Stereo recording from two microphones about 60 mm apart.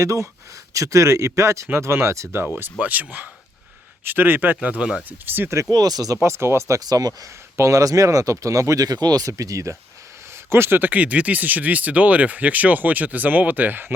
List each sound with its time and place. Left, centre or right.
0.0 s speech: right
1.6 s speech: right
2.7 s a man's voice: right
5.7 s speech: right
6.2 s speech: right
6.7 s speech: right
7.2 s speech: right
10.3 s speech: right